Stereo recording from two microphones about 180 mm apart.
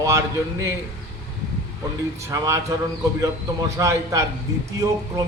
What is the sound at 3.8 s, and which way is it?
Speech, 15° right (ahead or behind).